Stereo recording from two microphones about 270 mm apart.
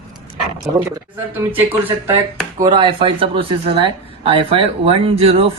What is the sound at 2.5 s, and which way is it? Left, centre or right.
Speech, centre.